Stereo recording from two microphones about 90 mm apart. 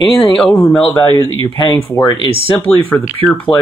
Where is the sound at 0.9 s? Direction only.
35° left (ahead or behind).